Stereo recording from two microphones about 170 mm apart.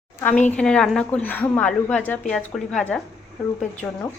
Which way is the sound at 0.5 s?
5° left (ahead or behind).